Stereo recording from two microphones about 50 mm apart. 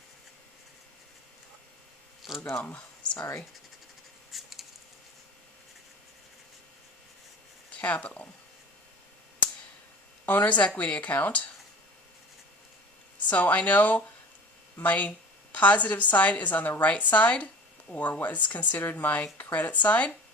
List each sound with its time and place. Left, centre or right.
2.3 s speech: centre
2.6 s speech: left
4.3 s a sound: centre
7.8 s speech: left
10.2 s a woman's voice: left
13.1 s a woman's voice: left